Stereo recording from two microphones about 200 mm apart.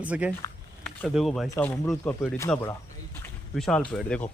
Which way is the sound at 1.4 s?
10° left (ahead or behind).